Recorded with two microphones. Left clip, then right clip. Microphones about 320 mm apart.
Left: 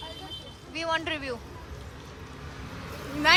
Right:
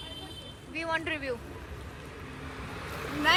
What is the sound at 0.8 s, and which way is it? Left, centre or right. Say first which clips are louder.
Speech: left 2 dB; centre.